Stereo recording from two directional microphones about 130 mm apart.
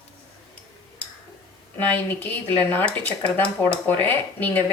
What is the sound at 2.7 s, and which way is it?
Speech, 15° left (ahead or behind).